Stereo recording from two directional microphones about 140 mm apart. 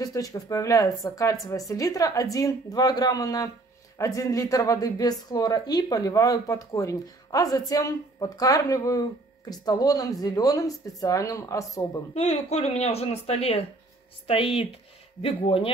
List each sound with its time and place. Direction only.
0.0 s speech: 25° left (ahead or behind)
12.1 s speech: 50° left (ahead or behind)